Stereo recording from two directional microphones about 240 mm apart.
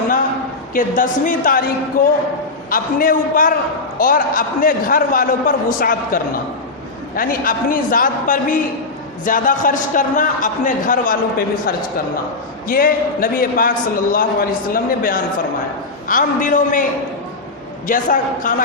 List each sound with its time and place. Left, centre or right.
0.7 s a man's voice: left
2.6 s a man's voice: left
17.8 s a man's voice: left